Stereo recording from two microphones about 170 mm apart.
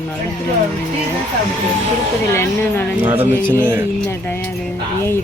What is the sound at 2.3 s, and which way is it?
Speech, 15° left (ahead or behind).